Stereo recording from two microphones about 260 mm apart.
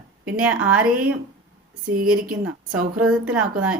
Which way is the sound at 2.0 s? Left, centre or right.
Right.